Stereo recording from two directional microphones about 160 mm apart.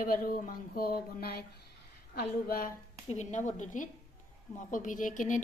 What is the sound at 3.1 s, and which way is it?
A woman's voice, 50° left (ahead or behind).